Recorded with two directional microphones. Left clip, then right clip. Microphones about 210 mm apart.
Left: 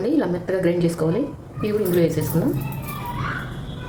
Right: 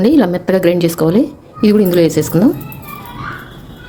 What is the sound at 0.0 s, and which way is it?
Speech, 45° right (ahead or behind).